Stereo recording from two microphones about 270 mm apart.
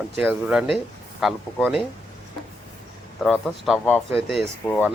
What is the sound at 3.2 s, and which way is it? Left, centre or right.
Speech, centre.